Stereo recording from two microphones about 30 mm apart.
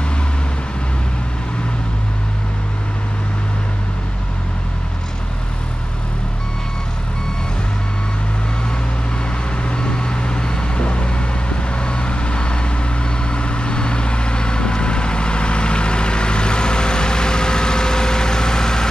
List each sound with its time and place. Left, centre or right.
9.6 s vehicle: left